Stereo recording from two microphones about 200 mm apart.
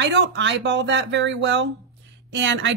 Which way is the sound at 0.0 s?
65° right (ahead or behind).